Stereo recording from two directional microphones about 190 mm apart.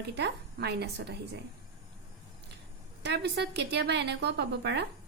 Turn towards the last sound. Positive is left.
turn(degrees=-65)  # may be behind; listen again after turning